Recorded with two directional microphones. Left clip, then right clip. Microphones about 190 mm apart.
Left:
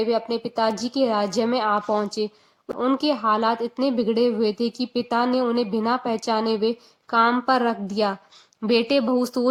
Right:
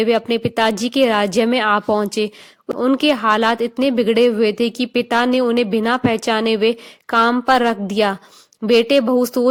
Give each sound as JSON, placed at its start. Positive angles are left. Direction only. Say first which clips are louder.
{"t": 0.0, "sound": "speech", "louder": "right 6 dB", "side_deg": -25}
{"t": 2.7, "sound": "speech", "louder": "right 5 dB", "side_deg": -15}
{"t": 3.0, "sound": "speech", "louder": "right 6 dB", "side_deg": -25}